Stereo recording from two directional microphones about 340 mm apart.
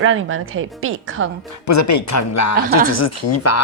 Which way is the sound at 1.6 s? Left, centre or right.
Left.